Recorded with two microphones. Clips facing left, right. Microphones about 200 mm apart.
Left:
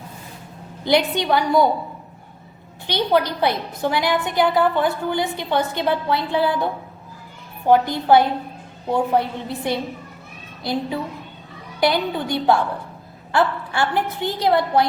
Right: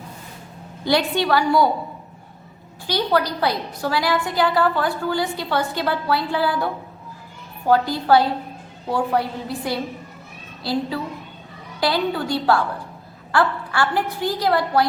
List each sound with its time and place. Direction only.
0.9 s a woman's voice: 20° left (ahead or behind)
2.8 s a woman's voice: 20° left (ahead or behind)
7.7 s a woman's voice: 20° left (ahead or behind)